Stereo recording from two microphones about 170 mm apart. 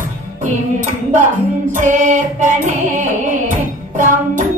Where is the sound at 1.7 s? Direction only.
50° right (ahead or behind).